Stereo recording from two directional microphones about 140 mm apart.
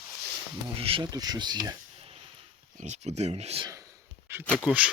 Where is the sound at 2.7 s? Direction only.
55° right (ahead or behind).